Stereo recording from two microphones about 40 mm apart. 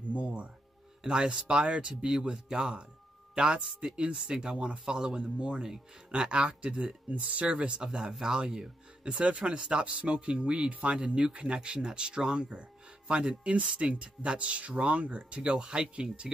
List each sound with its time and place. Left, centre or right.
0.1 s music: right
1.0 s speech: right